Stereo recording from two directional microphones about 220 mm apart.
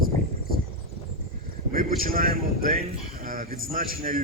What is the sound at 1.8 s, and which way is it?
A man's voice, 40° right (ahead or behind).